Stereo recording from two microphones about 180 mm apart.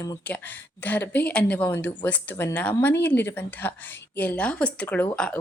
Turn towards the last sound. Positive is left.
turn(degrees=10)  # may be behind; listen again after turning